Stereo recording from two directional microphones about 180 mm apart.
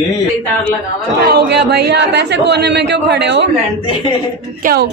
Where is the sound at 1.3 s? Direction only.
65° right (ahead or behind).